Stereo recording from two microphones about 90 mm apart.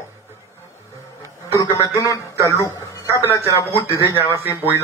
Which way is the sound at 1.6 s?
35° left (ahead or behind).